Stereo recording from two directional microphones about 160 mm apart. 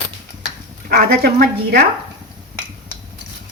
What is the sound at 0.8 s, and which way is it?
Speech, 70° right (ahead or behind).